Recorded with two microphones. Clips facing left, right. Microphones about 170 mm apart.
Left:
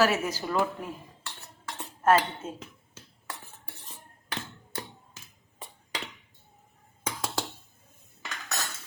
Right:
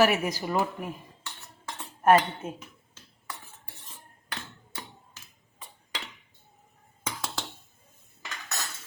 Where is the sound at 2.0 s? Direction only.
15° right (ahead or behind).